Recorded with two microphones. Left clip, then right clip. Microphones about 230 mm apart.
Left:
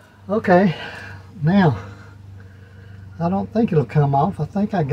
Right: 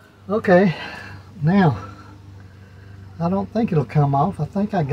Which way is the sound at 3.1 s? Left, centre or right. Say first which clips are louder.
Left 1 dB; centre.